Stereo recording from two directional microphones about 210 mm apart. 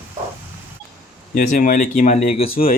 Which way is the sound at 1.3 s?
40° left (ahead or behind).